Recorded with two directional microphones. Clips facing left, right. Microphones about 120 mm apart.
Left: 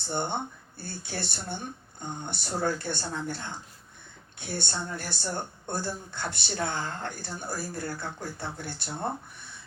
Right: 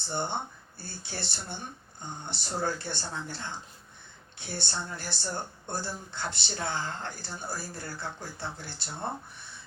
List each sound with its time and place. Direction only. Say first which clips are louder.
0.1 s speech: left 2 dB; 55° left (ahead or behind)